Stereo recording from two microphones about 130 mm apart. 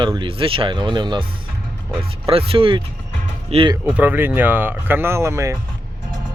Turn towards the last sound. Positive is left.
turn(degrees=-20)  # may be behind; listen again after turning